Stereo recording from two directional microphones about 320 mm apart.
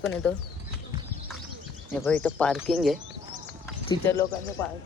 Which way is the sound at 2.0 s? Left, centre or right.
Centre.